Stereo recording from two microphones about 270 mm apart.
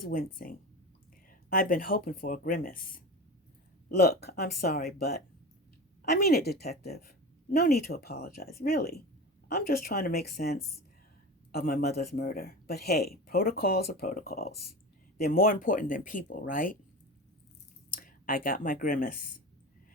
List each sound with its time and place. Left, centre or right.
0.0 s speech: left
17.9 s speech: left